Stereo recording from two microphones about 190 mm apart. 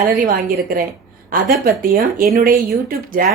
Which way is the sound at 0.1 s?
50° right (ahead or behind).